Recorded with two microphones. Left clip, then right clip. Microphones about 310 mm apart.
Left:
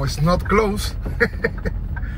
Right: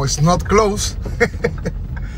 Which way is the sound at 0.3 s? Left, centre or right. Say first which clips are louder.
Right 3 dB; centre.